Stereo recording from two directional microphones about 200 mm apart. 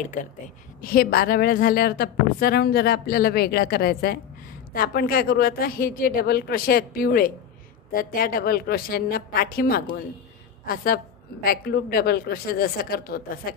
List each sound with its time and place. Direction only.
0.7 s a woman's voice: 45° left (ahead or behind)